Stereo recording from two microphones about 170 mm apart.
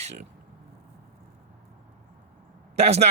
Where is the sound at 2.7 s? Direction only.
40° right (ahead or behind).